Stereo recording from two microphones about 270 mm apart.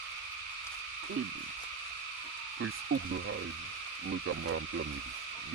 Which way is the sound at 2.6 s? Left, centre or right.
Right.